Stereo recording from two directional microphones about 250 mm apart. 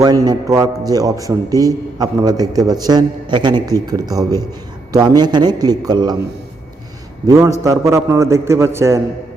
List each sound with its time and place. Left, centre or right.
0.0 s a man's voice: centre
7.3 s a man's voice: centre